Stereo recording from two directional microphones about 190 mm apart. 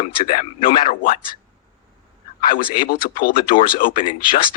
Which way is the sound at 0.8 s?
50° left (ahead or behind).